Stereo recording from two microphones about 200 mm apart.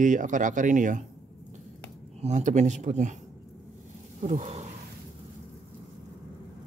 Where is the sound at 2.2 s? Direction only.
35° right (ahead or behind).